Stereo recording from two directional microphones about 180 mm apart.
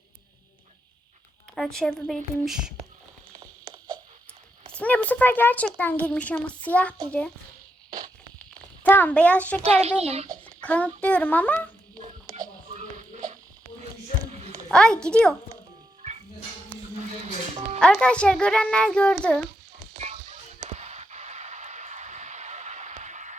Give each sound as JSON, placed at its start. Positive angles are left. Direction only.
{"t": 1.5, "sound": "speech", "side_deg": 0}
{"t": 3.4, "sound": "clip-clop", "side_deg": -25}
{"t": 4.8, "sound": "speech", "side_deg": 10}
{"t": 8.4, "sound": "a sound", "side_deg": 10}
{"t": 10.0, "sound": "a child's voice", "side_deg": -35}
{"t": 10.4, "sound": "a child's voice", "side_deg": 10}
{"t": 12.7, "sound": "music", "side_deg": -45}
{"t": 14.3, "sound": "a sound", "side_deg": -40}
{"t": 14.7, "sound": "speech", "side_deg": 5}
{"t": 17.7, "sound": "speech", "side_deg": 5}
{"t": 19.9, "sound": "music", "side_deg": -35}
{"t": 20.7, "sound": "a sound", "side_deg": -40}